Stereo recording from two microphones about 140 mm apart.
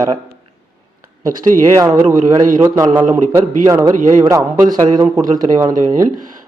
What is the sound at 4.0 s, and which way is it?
Speech, 65° right (ahead or behind).